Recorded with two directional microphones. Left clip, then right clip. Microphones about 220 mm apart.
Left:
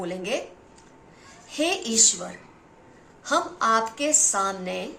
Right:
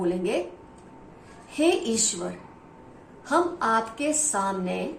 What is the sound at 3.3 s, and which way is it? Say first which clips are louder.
A woman's voice: left 1 dB; 40° left (ahead or behind).